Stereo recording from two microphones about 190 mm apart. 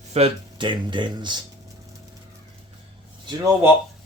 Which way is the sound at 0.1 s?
30° right (ahead or behind).